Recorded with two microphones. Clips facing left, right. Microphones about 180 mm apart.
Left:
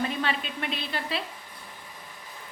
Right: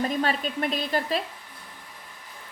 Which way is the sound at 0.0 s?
40° right (ahead or behind).